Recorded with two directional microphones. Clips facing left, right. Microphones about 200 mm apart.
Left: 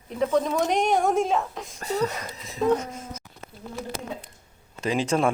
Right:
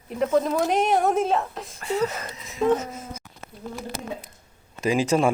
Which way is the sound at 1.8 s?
40° left (ahead or behind).